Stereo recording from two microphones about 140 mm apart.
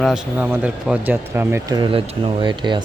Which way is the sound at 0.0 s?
5° right (ahead or behind).